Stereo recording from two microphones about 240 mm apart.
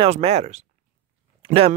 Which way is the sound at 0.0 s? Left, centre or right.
Right.